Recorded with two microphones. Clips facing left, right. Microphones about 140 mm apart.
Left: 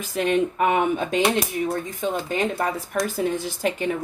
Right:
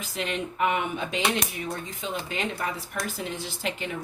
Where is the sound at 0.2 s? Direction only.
45° left (ahead or behind).